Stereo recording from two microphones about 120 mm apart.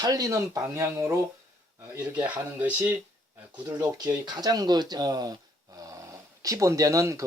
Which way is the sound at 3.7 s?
30° right (ahead or behind).